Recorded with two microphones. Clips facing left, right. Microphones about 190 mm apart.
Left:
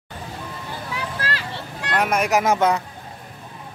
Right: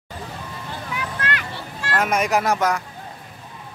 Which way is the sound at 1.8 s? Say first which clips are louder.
Even; 15° left (ahead or behind).